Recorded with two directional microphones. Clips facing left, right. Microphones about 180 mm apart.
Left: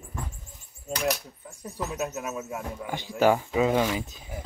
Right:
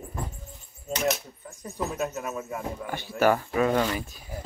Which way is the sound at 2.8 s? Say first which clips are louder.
Left 1 dB; 15° left (ahead or behind).